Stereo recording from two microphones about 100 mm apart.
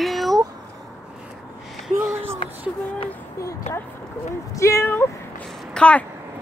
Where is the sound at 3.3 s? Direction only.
30° left (ahead or behind).